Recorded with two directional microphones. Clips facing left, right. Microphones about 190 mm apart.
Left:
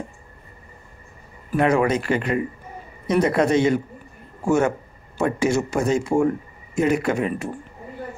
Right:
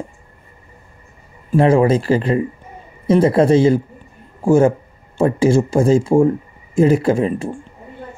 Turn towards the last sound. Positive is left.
turn(degrees=-30)  # may be behind; listen again after turning